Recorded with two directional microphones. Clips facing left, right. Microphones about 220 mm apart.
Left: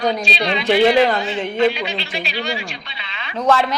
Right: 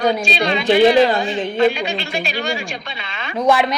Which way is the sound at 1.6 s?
45° right (ahead or behind).